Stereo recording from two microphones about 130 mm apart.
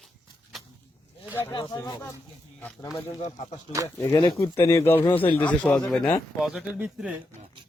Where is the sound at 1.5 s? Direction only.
35° left (ahead or behind).